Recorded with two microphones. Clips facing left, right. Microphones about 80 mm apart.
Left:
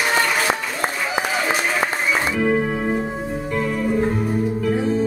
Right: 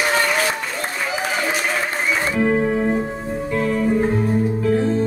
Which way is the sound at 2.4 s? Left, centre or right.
Centre.